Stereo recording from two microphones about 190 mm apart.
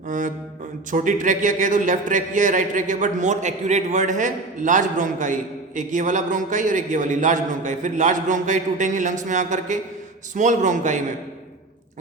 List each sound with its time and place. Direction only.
0.9 s a man's voice: 45° right (ahead or behind)